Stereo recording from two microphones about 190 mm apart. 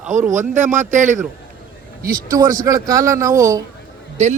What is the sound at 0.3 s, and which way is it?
Speech, 40° right (ahead or behind).